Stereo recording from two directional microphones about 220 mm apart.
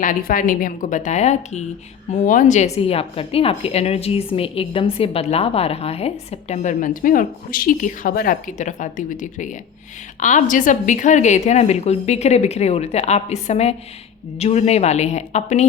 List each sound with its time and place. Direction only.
0.0 s a woman's voice: 40° left (ahead or behind)